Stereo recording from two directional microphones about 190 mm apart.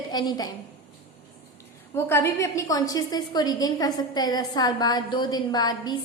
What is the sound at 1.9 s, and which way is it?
A woman's voice, 15° left (ahead or behind).